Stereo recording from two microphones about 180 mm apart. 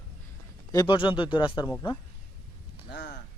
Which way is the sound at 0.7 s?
25° left (ahead or behind).